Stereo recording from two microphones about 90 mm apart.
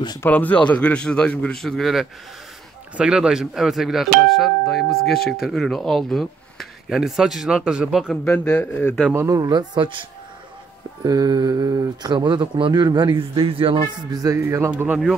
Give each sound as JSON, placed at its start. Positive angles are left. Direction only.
{"t": 0.3, "sound": "speech", "side_deg": 15}
{"t": 8.3, "sound": "speech", "side_deg": 20}
{"t": 9.3, "sound": "speech", "side_deg": -50}
{"t": 11.1, "sound": "speech", "side_deg": -45}
{"t": 12.8, "sound": "a man's voice", "side_deg": -55}
{"t": 14.1, "sound": "music", "side_deg": -35}